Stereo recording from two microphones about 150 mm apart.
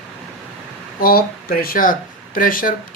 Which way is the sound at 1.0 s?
85° left.